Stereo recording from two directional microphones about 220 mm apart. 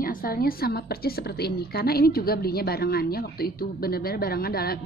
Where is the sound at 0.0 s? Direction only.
40° left (ahead or behind).